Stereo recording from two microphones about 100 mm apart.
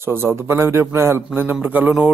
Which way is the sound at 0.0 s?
25° right (ahead or behind).